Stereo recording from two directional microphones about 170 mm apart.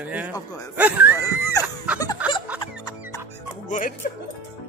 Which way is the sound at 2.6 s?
25° left (ahead or behind).